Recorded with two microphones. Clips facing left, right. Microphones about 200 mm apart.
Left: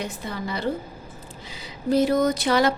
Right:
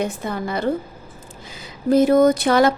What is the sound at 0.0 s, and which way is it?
A woman's voice, 50° right (ahead or behind).